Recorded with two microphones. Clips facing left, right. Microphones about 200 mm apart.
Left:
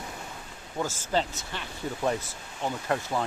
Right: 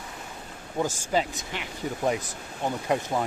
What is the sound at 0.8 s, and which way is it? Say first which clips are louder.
Speech: right 2 dB; 15° right (ahead or behind).